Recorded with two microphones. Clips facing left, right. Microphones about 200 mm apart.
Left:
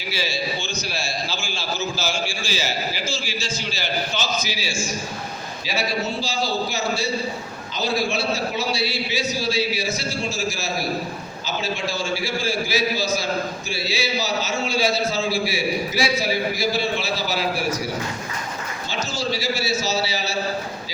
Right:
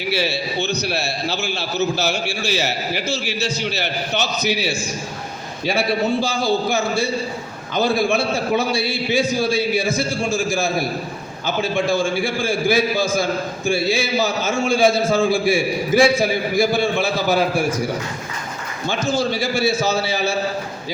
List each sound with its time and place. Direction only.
0.1 s a man's voice: 65° right (ahead or behind)
18.9 s a man's voice: 55° right (ahead or behind)